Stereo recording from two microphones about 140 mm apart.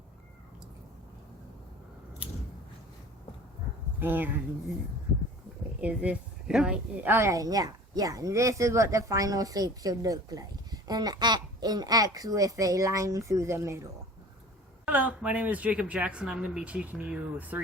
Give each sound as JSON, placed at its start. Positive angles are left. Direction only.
{"t": 4.0, "sound": "speech", "side_deg": -15}
{"t": 5.8, "sound": "a woman's voice", "side_deg": -10}
{"t": 14.8, "sound": "speech", "side_deg": -10}